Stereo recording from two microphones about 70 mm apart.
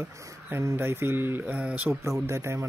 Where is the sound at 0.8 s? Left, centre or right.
Right.